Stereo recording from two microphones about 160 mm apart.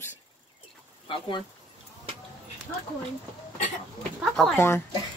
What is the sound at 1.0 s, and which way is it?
Speech, 30° left (ahead or behind).